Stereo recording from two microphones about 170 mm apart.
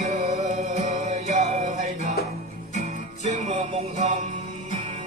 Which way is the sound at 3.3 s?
40° right (ahead or behind).